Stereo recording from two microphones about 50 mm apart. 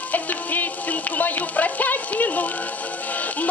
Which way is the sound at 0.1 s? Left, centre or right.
Left.